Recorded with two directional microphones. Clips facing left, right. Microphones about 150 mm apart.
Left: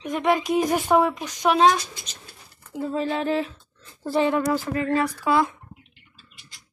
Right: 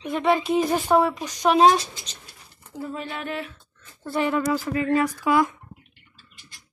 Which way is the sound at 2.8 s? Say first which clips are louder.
Left 7 dB; 35° left (ahead or behind).